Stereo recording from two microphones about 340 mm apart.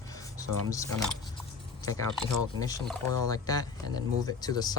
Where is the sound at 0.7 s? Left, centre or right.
Centre.